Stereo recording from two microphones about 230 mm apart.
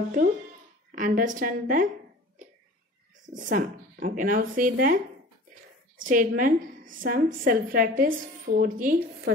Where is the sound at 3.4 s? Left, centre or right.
Right.